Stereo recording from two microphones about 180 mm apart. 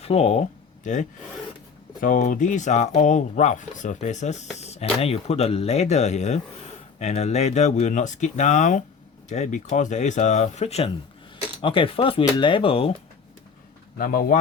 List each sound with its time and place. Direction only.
0.0 s speech: 35° left (ahead or behind)
14.0 s speech: 55° left (ahead or behind)